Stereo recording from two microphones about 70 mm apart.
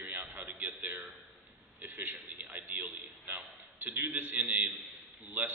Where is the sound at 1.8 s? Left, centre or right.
Right.